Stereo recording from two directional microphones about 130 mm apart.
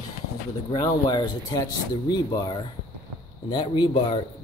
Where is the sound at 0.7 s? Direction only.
35° left (ahead or behind).